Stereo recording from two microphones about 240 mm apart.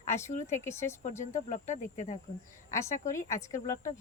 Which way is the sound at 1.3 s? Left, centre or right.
Left.